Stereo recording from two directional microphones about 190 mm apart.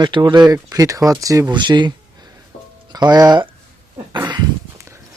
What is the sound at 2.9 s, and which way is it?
Speech, 20° right (ahead or behind).